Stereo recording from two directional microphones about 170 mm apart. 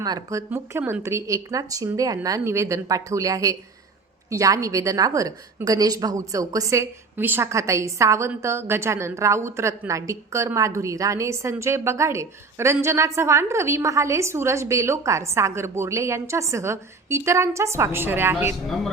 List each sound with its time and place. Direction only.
0.0 s a woman's voice: 20° right (ahead or behind)